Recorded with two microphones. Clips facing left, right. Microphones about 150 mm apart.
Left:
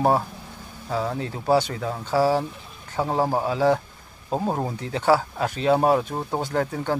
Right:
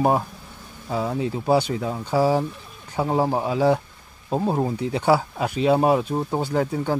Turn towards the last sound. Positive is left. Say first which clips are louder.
# right 2 dB
turn(degrees=-10)  # may be behind; listen again after turning